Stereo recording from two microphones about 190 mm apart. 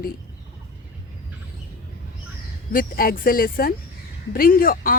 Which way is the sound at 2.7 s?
50° left (ahead or behind).